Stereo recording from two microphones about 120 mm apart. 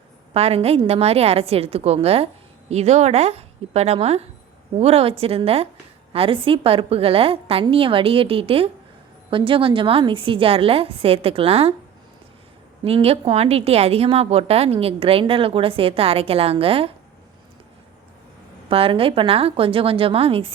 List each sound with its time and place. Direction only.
0.3 s a woman's voice: 60° right (ahead or behind)
12.8 s a woman's voice: 55° right (ahead or behind)
18.7 s a woman's voice: 50° right (ahead or behind)